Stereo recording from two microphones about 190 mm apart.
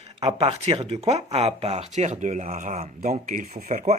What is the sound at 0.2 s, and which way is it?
Speech, 30° right (ahead or behind).